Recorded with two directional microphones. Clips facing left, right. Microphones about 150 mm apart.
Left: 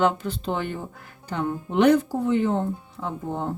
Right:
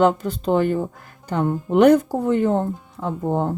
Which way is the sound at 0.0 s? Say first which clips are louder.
Right 5 dB; 40° right (ahead or behind).